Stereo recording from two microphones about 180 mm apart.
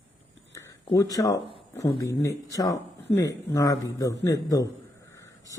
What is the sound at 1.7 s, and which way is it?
A man's voice, 20° left (ahead or behind).